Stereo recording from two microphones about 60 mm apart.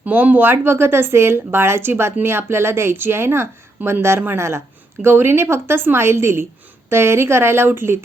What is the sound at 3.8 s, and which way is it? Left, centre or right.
Speech, right.